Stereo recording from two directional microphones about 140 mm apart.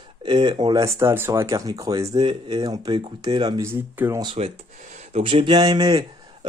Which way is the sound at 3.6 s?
20° right (ahead or behind).